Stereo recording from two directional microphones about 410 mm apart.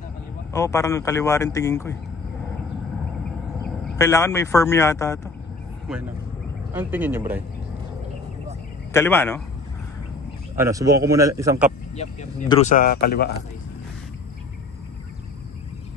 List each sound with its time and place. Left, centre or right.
0.5 s speech: centre
3.6 s speech: centre
6.7 s speech: centre
8.9 s speech: centre
10.6 s a man's voice: centre
11.9 s speech: centre